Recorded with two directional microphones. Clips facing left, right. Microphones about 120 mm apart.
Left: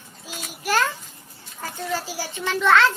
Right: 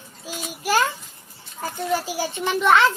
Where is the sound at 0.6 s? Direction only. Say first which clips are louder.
Right 1 dB; 10° right (ahead or behind).